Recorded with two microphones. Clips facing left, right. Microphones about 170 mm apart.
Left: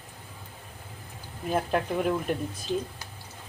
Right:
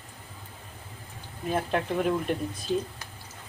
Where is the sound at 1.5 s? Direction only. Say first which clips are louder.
Left 1 dB; centre (ahead or behind).